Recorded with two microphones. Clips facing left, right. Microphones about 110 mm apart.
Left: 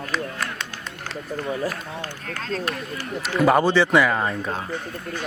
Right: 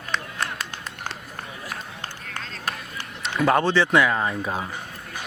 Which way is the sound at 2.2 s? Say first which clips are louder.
Left 7 dB; 45° left (ahead or behind).